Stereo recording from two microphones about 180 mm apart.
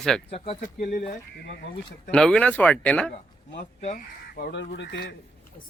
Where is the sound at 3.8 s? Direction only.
40° left (ahead or behind).